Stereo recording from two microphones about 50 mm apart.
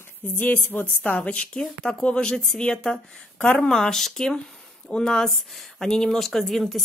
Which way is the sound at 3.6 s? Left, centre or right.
Centre.